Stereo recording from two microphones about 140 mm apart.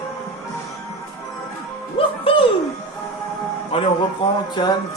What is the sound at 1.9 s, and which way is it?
Music, 40° left (ahead or behind).